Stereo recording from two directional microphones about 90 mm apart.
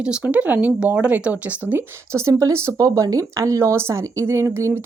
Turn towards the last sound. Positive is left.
turn(degrees=-30)  # may be behind; listen again after turning